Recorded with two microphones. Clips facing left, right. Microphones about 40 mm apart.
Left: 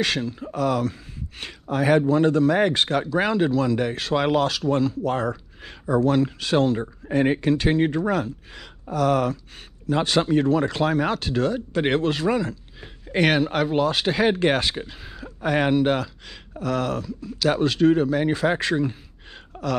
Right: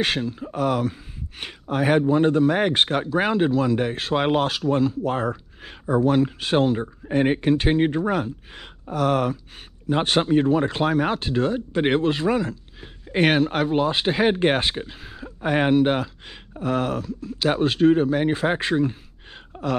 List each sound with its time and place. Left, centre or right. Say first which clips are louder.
0.2 s speech: right 1 dB; centre
0.6 s speech: even; right
3.1 s speech: right 1 dB; centre
4.6 s speech: right 1 dB; centre
6.4 s speech: even; right
10.3 s speech: right 1 dB; centre
14.8 s speech: right 1 dB; centre
15.4 s speech: right 1 dB; right
19.5 s throat clearing: right 1 dB; centre